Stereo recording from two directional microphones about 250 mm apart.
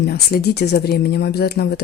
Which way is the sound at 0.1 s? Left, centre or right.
Left.